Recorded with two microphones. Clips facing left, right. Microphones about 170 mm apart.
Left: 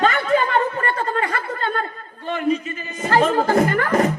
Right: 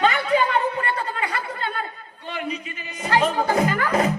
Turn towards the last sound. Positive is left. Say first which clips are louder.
# left 3 dB
turn(degrees=50)  # may be behind; listen again after turning